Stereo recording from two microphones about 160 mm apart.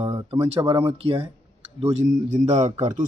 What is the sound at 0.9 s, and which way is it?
Speech, 35° right (ahead or behind).